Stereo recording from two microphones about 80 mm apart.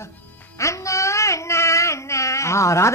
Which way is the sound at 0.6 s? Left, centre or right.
Left.